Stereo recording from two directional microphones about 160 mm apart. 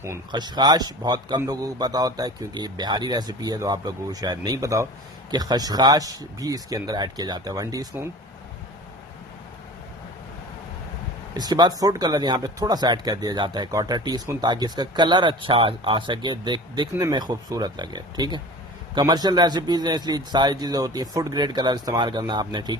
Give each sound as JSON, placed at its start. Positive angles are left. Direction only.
{"t": 0.3, "sound": "speech", "side_deg": -25}
{"t": 11.3, "sound": "speech", "side_deg": -25}